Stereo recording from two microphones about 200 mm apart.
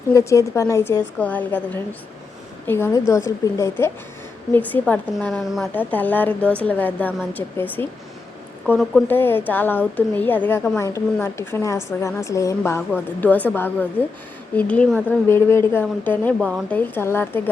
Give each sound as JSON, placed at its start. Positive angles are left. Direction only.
{"t": 0.1, "sound": "a woman's voice", "side_deg": 15}